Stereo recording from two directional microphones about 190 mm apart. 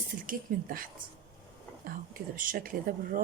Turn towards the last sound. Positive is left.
turn(degrees=-45)  # may be behind; listen again after turning